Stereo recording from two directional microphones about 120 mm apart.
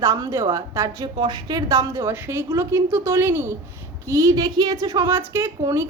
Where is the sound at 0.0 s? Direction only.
25° right (ahead or behind).